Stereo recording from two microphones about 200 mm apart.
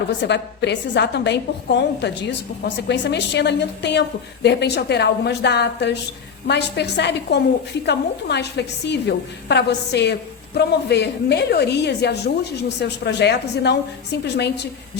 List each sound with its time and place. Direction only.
0.2 s a woman's voice: 60° left (ahead or behind)